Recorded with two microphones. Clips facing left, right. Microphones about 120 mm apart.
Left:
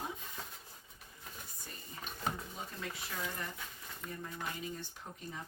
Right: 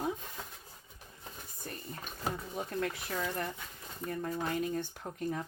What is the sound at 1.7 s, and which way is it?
Dishes, 55° right (ahead or behind).